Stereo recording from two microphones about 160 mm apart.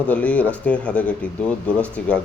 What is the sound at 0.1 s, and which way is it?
Speech, 10° left (ahead or behind).